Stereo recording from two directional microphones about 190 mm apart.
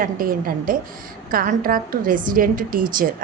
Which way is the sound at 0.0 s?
50° right (ahead or behind).